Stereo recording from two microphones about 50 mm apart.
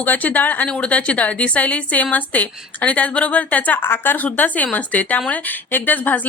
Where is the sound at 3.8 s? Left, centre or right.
Left.